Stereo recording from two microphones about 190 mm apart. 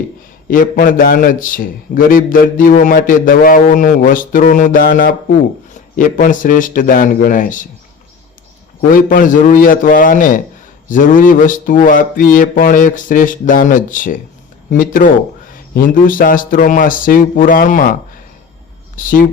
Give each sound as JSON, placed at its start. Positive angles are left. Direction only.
{"t": 0.5, "sound": "a man's voice", "side_deg": 45}
{"t": 8.9, "sound": "a man's voice", "side_deg": 45}
{"t": 18.9, "sound": "a man's voice", "side_deg": 45}